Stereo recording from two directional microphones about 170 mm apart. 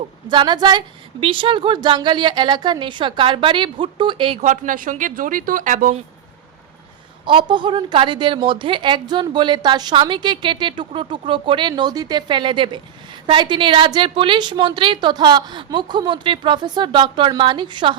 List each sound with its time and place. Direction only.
0.3 s a woman's voice: 25° right (ahead or behind)
4.4 s a woman's voice: 50° right (ahead or behind)
7.3 s a woman's voice: 30° right (ahead or behind)